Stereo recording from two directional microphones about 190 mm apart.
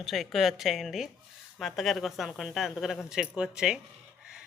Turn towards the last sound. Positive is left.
turn(degrees=-5)  # may be behind; listen again after turning